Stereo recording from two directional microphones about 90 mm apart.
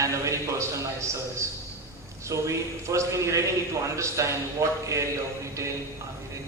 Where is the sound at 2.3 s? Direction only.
35° right (ahead or behind).